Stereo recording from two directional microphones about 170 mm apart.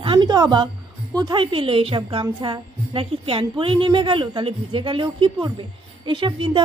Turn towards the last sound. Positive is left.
turn(degrees=-30)  # may be behind; listen again after turning